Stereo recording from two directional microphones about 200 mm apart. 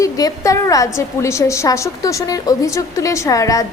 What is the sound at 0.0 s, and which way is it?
A woman's voice, 15° left (ahead or behind).